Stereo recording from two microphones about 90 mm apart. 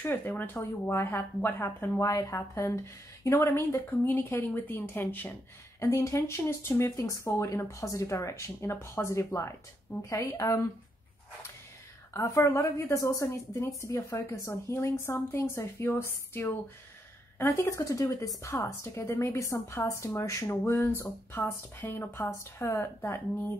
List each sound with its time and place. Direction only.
0.0 s speech: 20° left (ahead or behind)
2.0 s a woman's voice: 40° left (ahead or behind); by 5.3 s 25° left (ahead or behind)
5.8 s a woman's voice: 35° left (ahead or behind)
12.1 s a woman's voice: 35° left (ahead or behind)
20.4 s speech: 25° left (ahead or behind)